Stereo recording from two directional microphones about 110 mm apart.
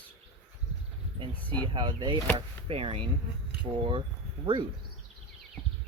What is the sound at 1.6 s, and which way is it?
Speech, 40° right (ahead or behind).